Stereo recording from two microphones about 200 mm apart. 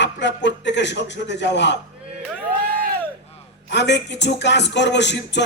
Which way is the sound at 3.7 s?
60° left (ahead or behind).